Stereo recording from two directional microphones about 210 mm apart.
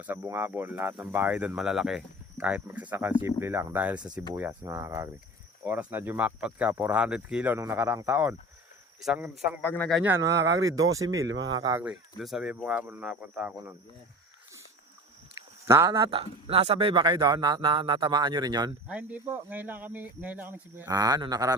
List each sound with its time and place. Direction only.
0.0 s speech: 10° right (ahead or behind)
9.6 s speech: 5° left (ahead or behind)
10.0 s speech: 10° right (ahead or behind)
10.3 s speech: 60° right (ahead or behind)
11.5 s speech: 20° right (ahead or behind)
11.8 s speech: 5° right (ahead or behind)
15.6 s speech: 15° right (ahead or behind)
16.0 s speech: 25° right (ahead or behind)
18.9 s speech: 5° right (ahead or behind)